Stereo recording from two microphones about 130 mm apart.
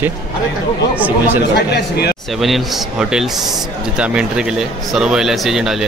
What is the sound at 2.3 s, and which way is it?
Speech, centre (ahead or behind).